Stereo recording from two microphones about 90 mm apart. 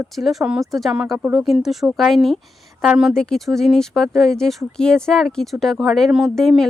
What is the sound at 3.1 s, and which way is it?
Speech, 5° left (ahead or behind).